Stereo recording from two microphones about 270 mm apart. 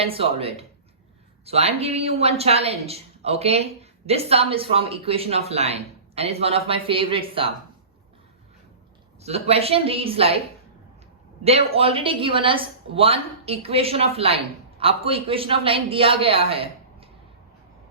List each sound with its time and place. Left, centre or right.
0.0 s speech: right
9.2 s speech: right
11.4 s speech: right